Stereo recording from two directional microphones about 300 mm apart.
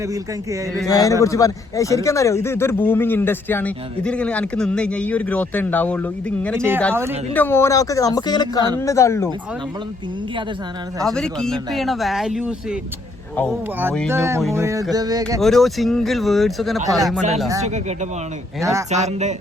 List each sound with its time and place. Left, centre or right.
0.9 s speech: centre
7.3 s speech: centre
11.0 s speech: centre
13.7 s speech: centre
14.1 s music: centre
15.4 s speech: centre
18.6 s music: centre
18.9 s speech: right